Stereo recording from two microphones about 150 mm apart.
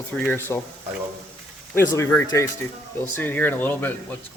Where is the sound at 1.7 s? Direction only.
20° left (ahead or behind).